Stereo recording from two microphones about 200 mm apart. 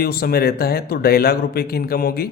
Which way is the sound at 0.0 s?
50° left (ahead or behind).